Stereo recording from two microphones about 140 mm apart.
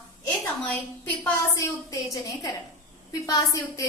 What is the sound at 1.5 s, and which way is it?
A woman's voice, 25° left (ahead or behind).